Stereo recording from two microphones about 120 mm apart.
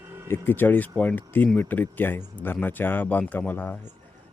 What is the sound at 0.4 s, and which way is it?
Speech, 15° left (ahead or behind).